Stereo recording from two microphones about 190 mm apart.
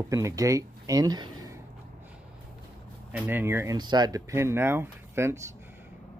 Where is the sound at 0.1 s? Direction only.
15° right (ahead or behind).